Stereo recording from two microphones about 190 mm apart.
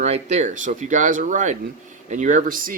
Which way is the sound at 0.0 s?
35° right (ahead or behind).